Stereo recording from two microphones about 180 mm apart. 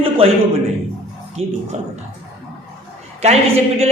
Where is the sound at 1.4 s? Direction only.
35° right (ahead or behind).